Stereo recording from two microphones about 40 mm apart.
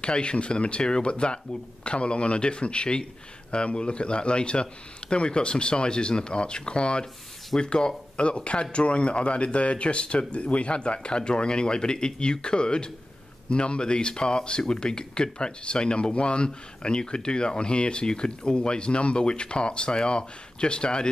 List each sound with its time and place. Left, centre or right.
0.0 s speech: left